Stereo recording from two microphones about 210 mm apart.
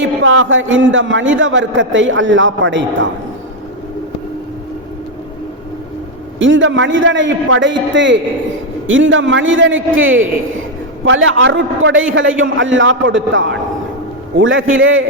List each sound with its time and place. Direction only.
0.0 s a man's voice: 65° right (ahead or behind)
6.4 s a man's voice: 65° right (ahead or behind)